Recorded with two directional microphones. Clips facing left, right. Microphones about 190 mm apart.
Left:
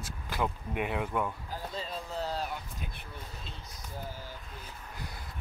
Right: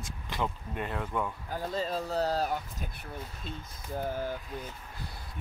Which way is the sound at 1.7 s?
40° right (ahead or behind).